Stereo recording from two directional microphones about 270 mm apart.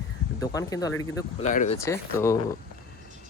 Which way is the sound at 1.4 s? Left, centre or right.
Left.